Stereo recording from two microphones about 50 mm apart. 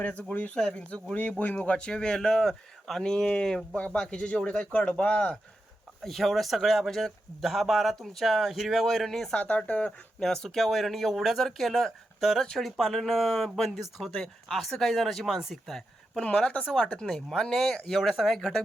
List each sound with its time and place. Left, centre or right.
0.0 s speech: left
0.5 s speech: centre
1.4 s speech: left
6.0 s speech: centre
9.3 s speech: left
10.2 s speech: centre
16.2 s speech: left
17.2 s speech: centre